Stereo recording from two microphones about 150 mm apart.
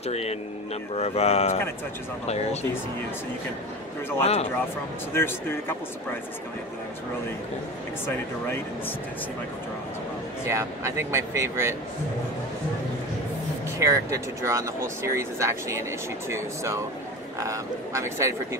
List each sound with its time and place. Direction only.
0.0 s speech: 45° left (ahead or behind)
4.2 s speech: 45° left (ahead or behind)
5.1 s speech: 15° left (ahead or behind)
10.5 s speech: 20° right (ahead or behind)
13.7 s speech: 20° right (ahead or behind)